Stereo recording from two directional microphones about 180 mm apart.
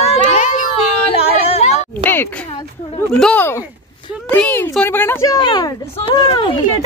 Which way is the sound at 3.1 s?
5° left (ahead or behind).